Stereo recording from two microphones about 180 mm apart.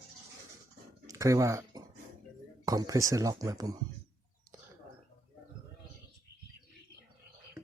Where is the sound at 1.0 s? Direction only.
20° right (ahead or behind).